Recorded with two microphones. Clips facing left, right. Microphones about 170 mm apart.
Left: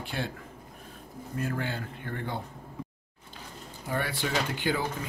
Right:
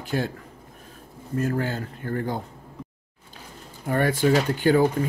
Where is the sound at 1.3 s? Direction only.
45° right (ahead or behind).